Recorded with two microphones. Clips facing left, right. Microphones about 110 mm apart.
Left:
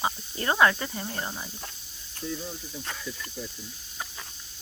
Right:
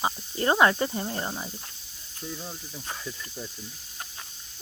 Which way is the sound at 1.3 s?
15° right (ahead or behind).